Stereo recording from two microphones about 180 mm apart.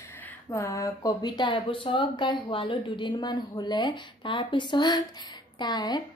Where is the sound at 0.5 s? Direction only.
15° left (ahead or behind).